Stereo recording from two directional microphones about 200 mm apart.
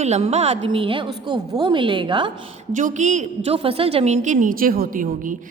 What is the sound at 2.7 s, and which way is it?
A woman's voice, 40° right (ahead or behind).